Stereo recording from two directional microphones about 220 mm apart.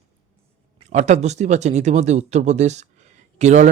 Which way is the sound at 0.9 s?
30° right (ahead or behind).